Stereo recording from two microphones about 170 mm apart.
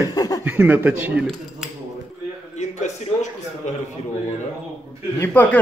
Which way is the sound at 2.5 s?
40° left (ahead or behind).